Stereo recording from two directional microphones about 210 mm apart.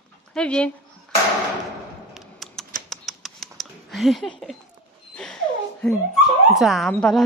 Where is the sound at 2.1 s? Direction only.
Centre (ahead or behind).